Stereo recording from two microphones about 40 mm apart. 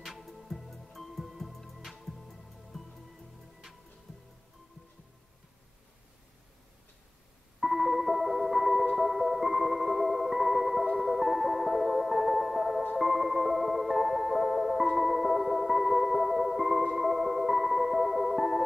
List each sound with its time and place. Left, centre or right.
0.0 s music: centre
7.6 s music: centre
8.9 s marimba: centre
12.9 s music: centre